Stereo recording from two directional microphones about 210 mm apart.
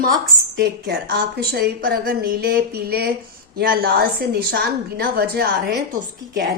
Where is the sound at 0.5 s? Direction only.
55° right (ahead or behind).